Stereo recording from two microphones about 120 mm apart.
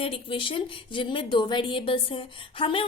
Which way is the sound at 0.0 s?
50° left (ahead or behind).